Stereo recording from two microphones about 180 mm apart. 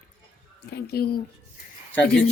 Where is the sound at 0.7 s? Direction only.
60° left (ahead or behind).